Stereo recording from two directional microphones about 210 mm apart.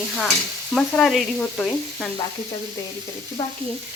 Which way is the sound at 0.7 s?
Centre (ahead or behind).